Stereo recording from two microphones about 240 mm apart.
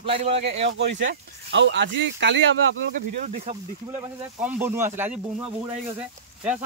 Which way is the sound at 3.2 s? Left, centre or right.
Right.